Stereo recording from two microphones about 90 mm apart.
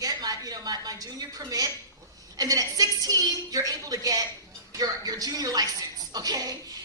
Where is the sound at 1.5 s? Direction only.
40° right (ahead or behind).